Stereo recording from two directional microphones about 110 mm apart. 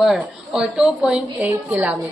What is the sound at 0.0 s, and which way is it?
A woman's voice, 5° right (ahead or behind).